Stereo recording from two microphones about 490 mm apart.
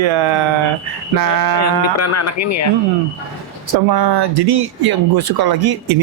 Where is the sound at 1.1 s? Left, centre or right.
Right.